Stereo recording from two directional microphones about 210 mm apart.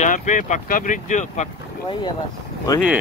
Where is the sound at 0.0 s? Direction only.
35° left (ahead or behind).